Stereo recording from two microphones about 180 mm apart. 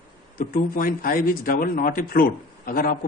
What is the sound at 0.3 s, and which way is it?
A man's voice, 50° left (ahead or behind).